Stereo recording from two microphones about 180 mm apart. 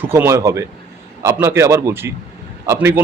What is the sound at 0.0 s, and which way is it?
Speech, 10° right (ahead or behind).